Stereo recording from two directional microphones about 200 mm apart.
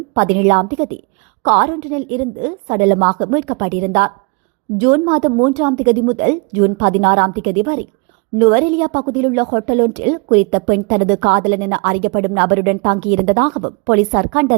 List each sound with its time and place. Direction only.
0.1 s a woman's voice: 40° right (ahead or behind)